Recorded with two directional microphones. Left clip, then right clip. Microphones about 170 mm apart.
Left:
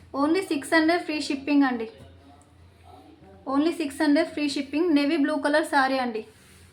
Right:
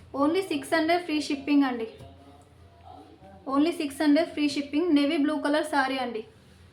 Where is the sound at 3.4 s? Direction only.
35° left (ahead or behind).